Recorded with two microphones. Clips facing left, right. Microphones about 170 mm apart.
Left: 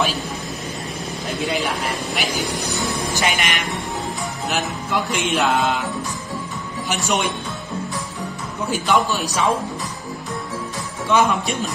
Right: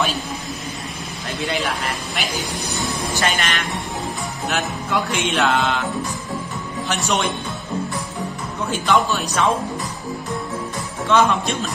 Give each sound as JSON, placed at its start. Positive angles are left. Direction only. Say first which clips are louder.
{"t": 1.2, "sound": "music", "louder": "left 1 dB", "side_deg": 0}
{"t": 3.2, "sound": "a man's voice", "louder": "right 2 dB", "side_deg": 15}
{"t": 4.5, "sound": "music", "louder": "right 1 dB", "side_deg": 0}
{"t": 6.9, "sound": "music", "louder": "even", "side_deg": 5}
{"t": 8.6, "sound": "a man's voice", "louder": "even", "side_deg": 5}
{"t": 11.1, "sound": "a man's voice", "louder": "right 1 dB", "side_deg": 10}